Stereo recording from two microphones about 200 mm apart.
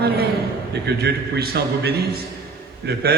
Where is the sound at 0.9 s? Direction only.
55° right (ahead or behind).